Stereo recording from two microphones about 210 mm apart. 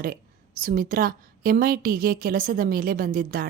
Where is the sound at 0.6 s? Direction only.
40° right (ahead or behind).